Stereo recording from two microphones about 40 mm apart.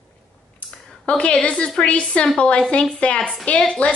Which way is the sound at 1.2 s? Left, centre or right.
Left.